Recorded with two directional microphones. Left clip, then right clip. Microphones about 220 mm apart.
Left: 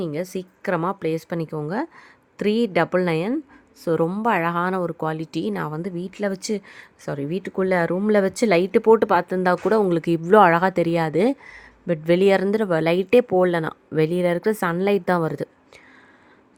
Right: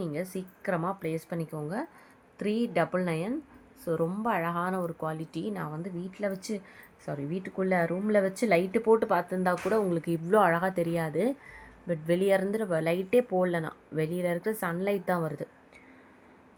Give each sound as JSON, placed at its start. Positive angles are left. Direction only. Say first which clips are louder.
{"t": 0.0, "sound": "speech", "louder": "left 7 dB", "side_deg": 45}